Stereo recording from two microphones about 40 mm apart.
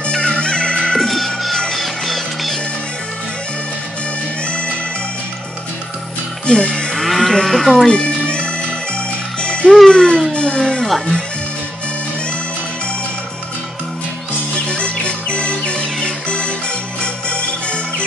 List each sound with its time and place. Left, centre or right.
0.1 s music: centre
0.9 s music: centre
6.6 s livestock: left
7.1 s livestock: centre
7.4 s speech: centre
7.9 s music: left
9.8 s speech: centre
10.3 s music: left
14.7 s music: left